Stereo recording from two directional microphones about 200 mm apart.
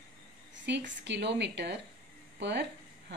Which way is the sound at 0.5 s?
60° right (ahead or behind).